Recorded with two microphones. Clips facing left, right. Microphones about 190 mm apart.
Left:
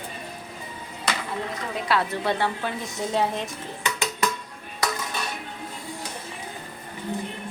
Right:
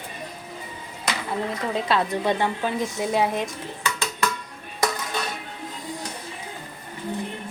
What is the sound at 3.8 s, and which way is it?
Dishes, 15° left (ahead or behind).